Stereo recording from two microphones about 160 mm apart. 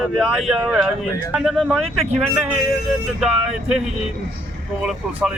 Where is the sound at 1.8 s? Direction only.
40° right (ahead or behind).